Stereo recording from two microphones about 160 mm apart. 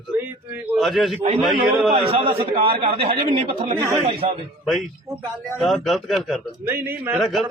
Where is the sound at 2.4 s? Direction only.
75° right (ahead or behind).